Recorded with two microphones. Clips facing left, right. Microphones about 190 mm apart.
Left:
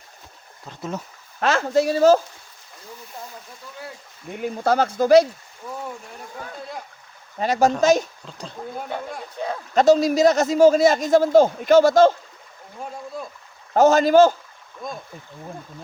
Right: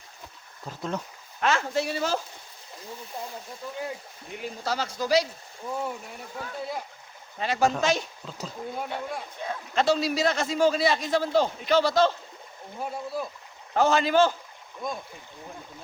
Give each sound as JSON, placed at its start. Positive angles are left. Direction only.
{"t": 0.7, "sound": "speech", "side_deg": 5}
{"t": 1.4, "sound": "speech", "side_deg": 40}
{"t": 4.3, "sound": "a man's voice", "side_deg": 50}
{"t": 7.3, "sound": "a man's voice", "side_deg": 40}
{"t": 8.3, "sound": "speech", "side_deg": -5}
{"t": 9.7, "sound": "a man's voice", "side_deg": 45}
{"t": 13.2, "sound": "speech", "side_deg": -5}
{"t": 13.7, "sound": "a man's voice", "side_deg": 45}